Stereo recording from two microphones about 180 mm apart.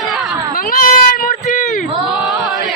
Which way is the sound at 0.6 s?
50° left (ahead or behind).